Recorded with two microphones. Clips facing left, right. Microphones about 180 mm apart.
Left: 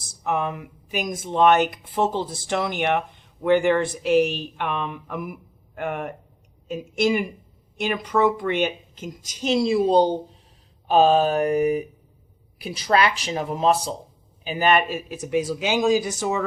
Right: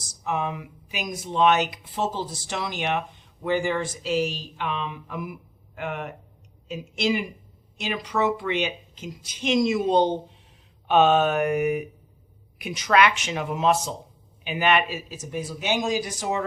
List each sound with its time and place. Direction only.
0.3 s speech: 55° left (ahead or behind); by 15.7 s 90° left